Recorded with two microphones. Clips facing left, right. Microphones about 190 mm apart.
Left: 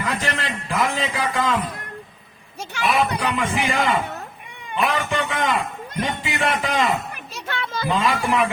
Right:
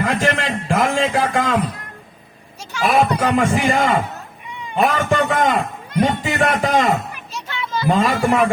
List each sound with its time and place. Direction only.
0.0 s a man's voice: 50° right (ahead or behind)
2.8 s a man's voice: 55° right (ahead or behind)
7.1 s a sound: 55° left (ahead or behind)
7.9 s a man's voice: 45° right (ahead or behind)